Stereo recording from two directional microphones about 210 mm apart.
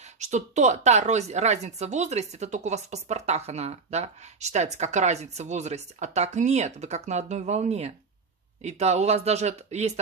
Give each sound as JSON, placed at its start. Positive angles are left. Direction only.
{"t": 0.2, "sound": "a woman's voice", "side_deg": -35}